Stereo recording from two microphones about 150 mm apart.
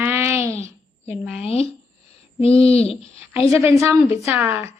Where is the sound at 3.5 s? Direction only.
20° right (ahead or behind).